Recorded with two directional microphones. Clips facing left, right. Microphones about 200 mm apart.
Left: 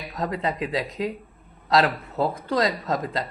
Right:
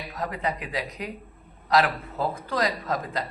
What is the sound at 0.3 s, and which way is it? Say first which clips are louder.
Speech: left 5 dB; 25° left (ahead or behind).